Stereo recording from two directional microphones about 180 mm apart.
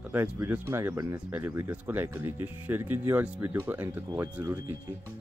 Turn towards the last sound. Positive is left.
turn(degrees=-15)  # may be behind; listen again after turning